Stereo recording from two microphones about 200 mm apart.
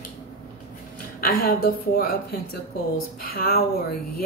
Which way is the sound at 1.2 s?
45° left (ahead or behind).